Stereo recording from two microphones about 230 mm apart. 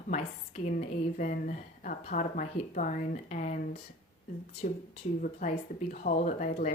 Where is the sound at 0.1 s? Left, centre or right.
Left.